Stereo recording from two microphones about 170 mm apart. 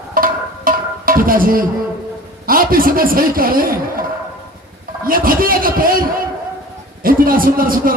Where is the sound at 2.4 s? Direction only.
60° right (ahead or behind).